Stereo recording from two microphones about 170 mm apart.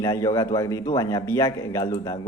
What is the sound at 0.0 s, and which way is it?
A man's voice, 20° left (ahead or behind).